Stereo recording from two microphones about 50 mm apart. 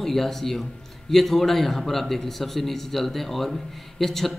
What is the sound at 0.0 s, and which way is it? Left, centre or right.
A man's voice, centre.